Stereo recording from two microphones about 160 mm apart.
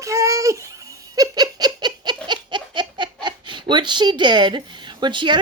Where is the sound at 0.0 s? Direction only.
20° right (ahead or behind).